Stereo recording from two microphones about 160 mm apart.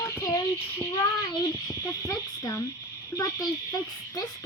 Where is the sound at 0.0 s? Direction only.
20° left (ahead or behind).